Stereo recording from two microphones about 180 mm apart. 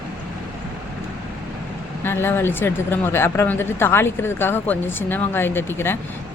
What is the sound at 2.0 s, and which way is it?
Speech, 10° left (ahead or behind).